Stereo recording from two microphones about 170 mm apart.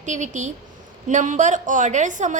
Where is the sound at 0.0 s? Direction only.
45° right (ahead or behind).